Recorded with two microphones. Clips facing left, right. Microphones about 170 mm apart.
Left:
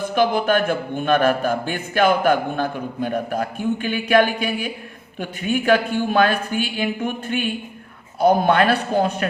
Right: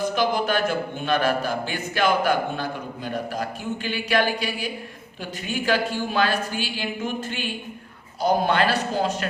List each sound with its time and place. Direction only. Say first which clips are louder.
0.2 s a man's voice: left 7 dB; 55° left (ahead or behind)